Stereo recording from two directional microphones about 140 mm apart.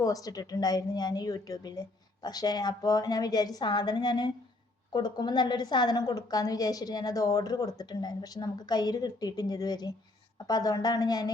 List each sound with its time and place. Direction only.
0.0 s a woman's voice: 25° left (ahead or behind)